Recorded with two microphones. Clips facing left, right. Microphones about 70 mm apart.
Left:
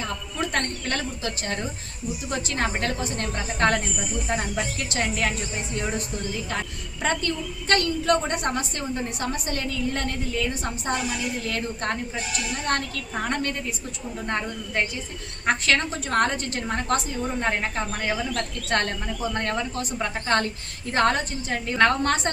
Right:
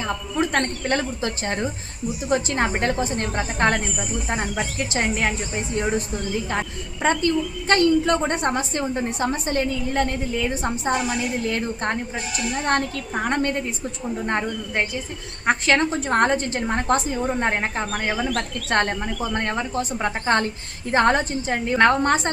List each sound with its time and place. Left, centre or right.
0.0 s a woman's voice: right